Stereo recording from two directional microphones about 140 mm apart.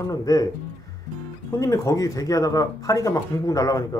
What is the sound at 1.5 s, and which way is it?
Speech, 25° left (ahead or behind).